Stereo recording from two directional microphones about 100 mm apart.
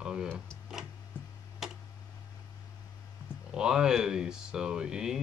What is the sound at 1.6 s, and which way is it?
Tick-tock, 5° right (ahead or behind).